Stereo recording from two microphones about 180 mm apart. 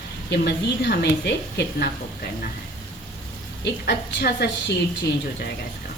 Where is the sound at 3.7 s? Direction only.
65° left (ahead or behind).